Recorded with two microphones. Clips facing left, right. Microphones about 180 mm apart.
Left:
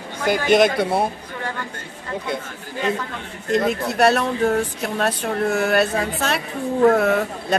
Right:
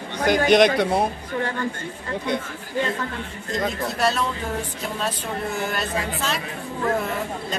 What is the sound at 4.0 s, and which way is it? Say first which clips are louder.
Speech: left 7 dB; 65° left (ahead or behind).